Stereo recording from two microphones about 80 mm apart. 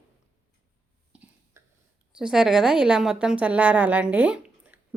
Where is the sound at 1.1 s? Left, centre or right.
Centre.